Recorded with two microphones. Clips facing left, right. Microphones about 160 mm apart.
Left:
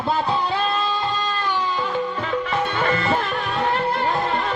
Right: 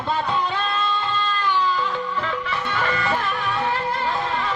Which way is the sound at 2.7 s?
25° left (ahead or behind).